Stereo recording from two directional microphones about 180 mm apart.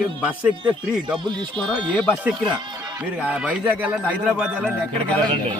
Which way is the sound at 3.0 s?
5° right (ahead or behind).